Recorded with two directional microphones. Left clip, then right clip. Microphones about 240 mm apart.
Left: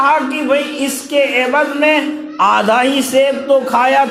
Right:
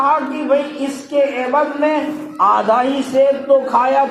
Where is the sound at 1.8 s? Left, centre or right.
Left.